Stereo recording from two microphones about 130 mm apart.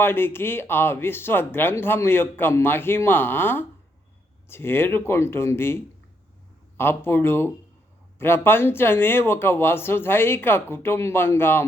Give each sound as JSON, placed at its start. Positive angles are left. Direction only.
{"t": 0.0, "sound": "speech", "side_deg": 15}